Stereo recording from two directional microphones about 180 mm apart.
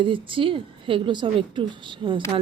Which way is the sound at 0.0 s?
30° right (ahead or behind).